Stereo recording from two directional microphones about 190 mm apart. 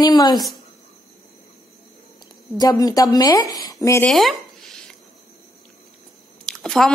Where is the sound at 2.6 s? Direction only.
20° left (ahead or behind).